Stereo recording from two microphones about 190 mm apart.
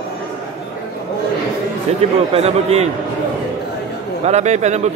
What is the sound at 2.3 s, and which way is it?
Speech, 30° right (ahead or behind).